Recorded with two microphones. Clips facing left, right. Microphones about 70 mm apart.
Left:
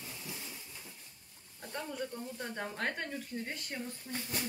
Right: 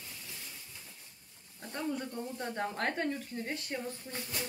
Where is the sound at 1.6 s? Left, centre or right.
Right.